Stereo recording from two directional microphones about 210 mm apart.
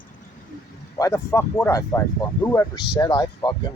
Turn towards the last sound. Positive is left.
turn(degrees=20)  # may be behind; listen again after turning